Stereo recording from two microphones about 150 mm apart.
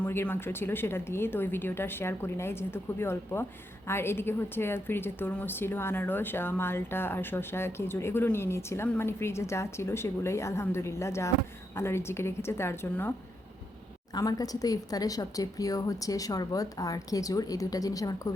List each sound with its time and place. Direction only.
0.0 s a woman's voice: 15° left (ahead or behind)
14.2 s a woman's voice: 25° left (ahead or behind)